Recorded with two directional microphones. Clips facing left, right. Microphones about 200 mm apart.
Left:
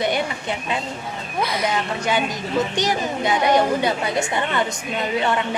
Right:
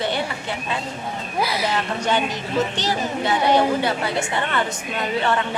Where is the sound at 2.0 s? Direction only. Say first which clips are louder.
Even; 10° left (ahead or behind).